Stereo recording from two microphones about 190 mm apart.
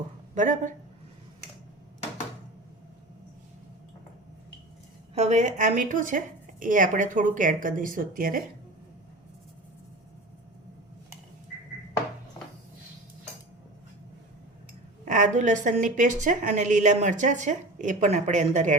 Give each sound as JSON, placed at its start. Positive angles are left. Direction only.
{"t": 0.3, "sound": "a woman's voice", "side_deg": -40}
{"t": 5.1, "sound": "a woman's voice", "side_deg": -35}
{"t": 15.0, "sound": "a woman's voice", "side_deg": -40}